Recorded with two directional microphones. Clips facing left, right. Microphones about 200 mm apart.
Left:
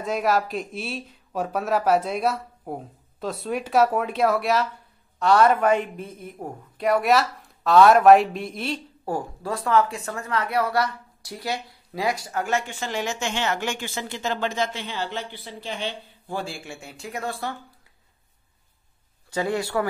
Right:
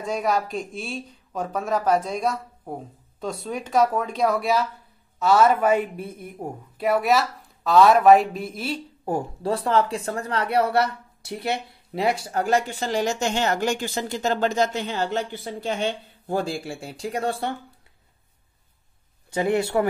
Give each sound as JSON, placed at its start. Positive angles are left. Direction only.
{"t": 0.0, "sound": "speech", "side_deg": 0}
{"t": 9.0, "sound": "speech", "side_deg": -25}
{"t": 19.3, "sound": "speech", "side_deg": -20}